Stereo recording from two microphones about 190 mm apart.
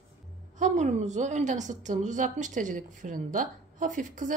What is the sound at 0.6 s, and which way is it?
A woman's voice, 40° right (ahead or behind).